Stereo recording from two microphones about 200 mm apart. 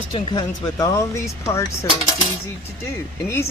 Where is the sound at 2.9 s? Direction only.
15° left (ahead or behind).